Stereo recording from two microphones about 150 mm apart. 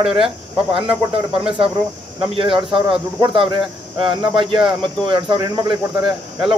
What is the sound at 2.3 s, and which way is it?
Speech, 35° right (ahead or behind).